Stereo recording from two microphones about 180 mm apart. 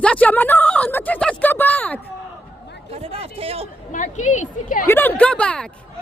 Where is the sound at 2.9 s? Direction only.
35° right (ahead or behind).